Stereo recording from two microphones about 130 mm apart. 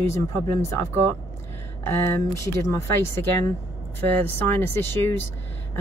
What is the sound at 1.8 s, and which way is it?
Speech, 20° left (ahead or behind).